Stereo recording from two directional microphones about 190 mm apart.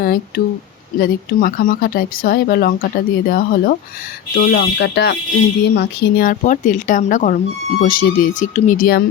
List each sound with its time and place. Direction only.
0.0 s speech: 50° left (ahead or behind)